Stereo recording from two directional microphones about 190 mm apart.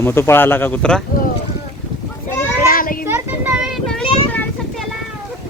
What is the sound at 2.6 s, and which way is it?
Children playing, 50° left (ahead or behind).